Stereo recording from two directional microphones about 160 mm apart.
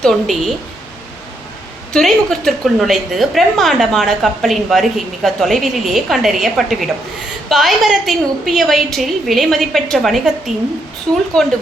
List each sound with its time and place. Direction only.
0.0 s a woman's voice: centre (ahead or behind)
1.9 s a woman's voice: 5° left (ahead or behind)